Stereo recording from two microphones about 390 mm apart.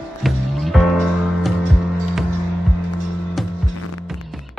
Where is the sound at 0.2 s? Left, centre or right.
Centre.